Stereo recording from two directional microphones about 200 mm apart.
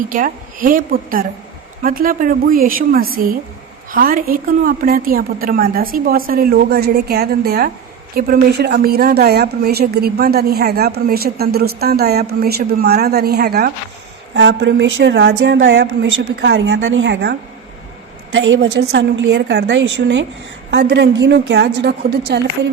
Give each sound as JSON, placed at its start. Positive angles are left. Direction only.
{"t": 0.1, "sound": "a woman's voice", "side_deg": -45}
{"t": 18.3, "sound": "speech", "side_deg": -75}